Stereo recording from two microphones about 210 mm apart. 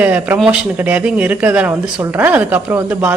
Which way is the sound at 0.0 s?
5° right (ahead or behind).